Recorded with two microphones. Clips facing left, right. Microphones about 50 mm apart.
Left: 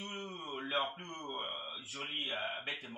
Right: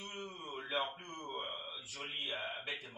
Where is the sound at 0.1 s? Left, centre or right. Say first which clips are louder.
Left 2 dB; left.